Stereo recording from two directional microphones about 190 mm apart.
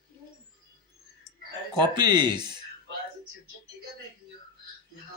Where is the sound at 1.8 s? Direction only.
25° right (ahead or behind).